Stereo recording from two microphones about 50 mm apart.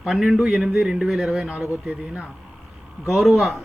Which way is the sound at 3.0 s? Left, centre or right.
Centre.